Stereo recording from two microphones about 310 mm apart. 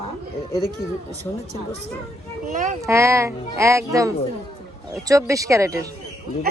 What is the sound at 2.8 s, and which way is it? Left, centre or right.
Speech, centre.